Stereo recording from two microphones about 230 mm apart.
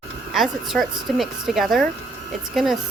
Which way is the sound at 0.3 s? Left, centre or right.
Centre.